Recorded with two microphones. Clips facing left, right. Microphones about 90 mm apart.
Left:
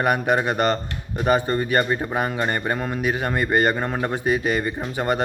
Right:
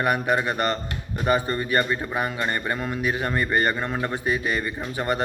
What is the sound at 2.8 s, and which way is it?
Speech, 40° left (ahead or behind).